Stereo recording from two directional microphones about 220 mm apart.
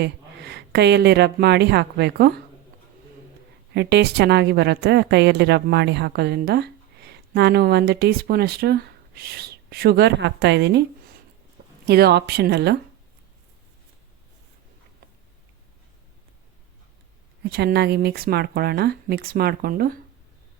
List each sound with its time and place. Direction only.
0.0 s speech: 50° right (ahead or behind)
3.8 s a woman's voice: 50° right (ahead or behind)
11.9 s a woman's voice: 45° right (ahead or behind)
17.5 s a woman's voice: 45° right (ahead or behind)